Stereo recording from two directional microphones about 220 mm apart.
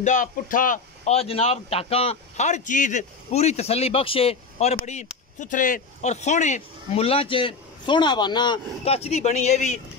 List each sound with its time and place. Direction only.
0.0 s a man's voice: 35° left (ahead or behind)